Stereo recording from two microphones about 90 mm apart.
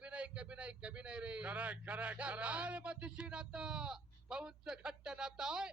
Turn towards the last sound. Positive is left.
turn(degrees=-5)  # may be behind; listen again after turning